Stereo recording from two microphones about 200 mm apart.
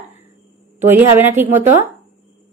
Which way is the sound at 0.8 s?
10° right (ahead or behind).